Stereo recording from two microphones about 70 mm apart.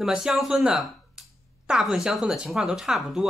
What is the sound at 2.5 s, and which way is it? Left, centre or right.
Speech, centre.